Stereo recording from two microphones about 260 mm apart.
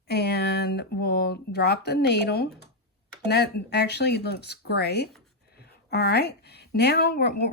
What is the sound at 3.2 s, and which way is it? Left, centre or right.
Speech, left.